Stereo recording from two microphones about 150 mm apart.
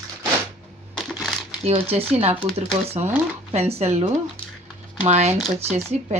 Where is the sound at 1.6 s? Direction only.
40° right (ahead or behind).